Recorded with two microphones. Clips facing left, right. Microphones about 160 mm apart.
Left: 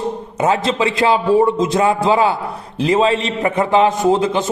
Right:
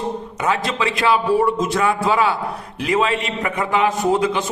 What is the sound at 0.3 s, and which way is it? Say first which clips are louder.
A man's voice: left 6 dB; 30° left (ahead or behind).